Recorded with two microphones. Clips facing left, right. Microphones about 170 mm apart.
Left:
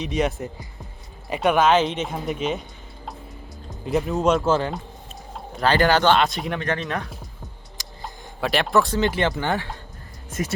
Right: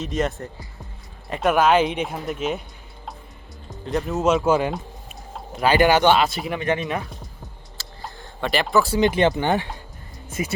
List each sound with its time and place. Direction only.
0.0 s speech: centre (ahead or behind)
3.7 s speech: centre (ahead or behind)
6.6 s speech: 15° right (ahead or behind)
7.8 s a sound: 15° left (ahead or behind)
8.4 s speech: centre (ahead or behind)
9.0 s speech: 20° right (ahead or behind)